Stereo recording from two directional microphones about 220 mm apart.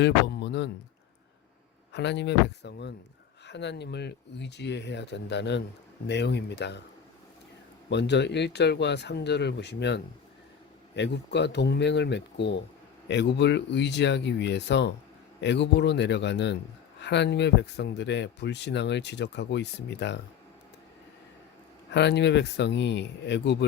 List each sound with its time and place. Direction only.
0.0 s a sound: 50° left (ahead or behind)
1.9 s speech: 50° left (ahead or behind)
7.9 s speech: 50° left (ahead or behind)
21.9 s speech: 50° left (ahead or behind)